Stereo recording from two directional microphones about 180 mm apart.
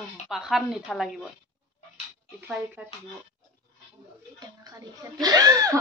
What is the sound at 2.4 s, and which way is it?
Speech, 10° right (ahead or behind).